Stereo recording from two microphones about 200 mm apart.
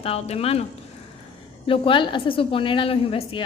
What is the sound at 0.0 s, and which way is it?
Speech, 30° left (ahead or behind).